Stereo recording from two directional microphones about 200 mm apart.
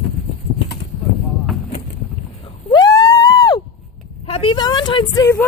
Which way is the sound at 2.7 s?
20° left (ahead or behind).